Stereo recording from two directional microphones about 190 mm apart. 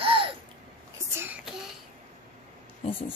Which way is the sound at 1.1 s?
10° right (ahead or behind).